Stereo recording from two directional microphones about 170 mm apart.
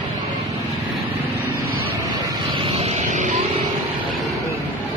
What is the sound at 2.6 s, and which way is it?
Vehicle, 35° right (ahead or behind).